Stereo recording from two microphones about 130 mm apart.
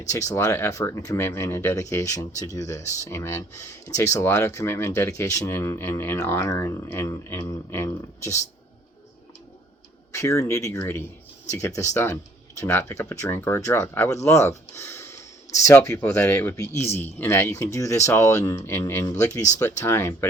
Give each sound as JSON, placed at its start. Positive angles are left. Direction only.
{"t": 0.0, "sound": "speech", "side_deg": 25}
{"t": 10.1, "sound": "speech", "side_deg": 20}